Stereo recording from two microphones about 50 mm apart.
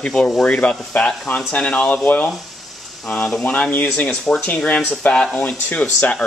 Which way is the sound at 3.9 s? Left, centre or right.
Left.